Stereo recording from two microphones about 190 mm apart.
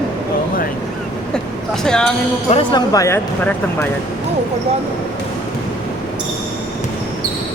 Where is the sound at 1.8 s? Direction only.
5° left (ahead or behind).